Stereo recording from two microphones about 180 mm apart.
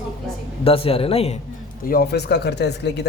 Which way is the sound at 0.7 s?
30° left (ahead or behind).